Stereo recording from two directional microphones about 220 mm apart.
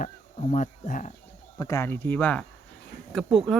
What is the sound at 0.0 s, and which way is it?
Speech, 35° left (ahead or behind).